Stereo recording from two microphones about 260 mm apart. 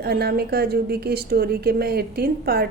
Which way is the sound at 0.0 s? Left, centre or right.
Right.